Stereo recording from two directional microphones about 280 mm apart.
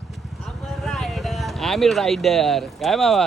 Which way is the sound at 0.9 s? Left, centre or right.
Centre.